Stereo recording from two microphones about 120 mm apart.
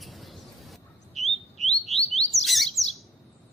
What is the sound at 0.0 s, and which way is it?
Bird, centre (ahead or behind).